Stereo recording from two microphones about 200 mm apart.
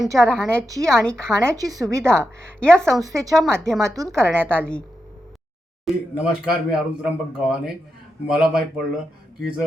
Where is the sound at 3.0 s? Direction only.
15° right (ahead or behind).